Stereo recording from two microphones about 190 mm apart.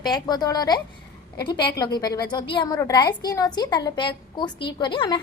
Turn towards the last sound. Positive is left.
turn(degrees=25)  # may be behind; listen again after turning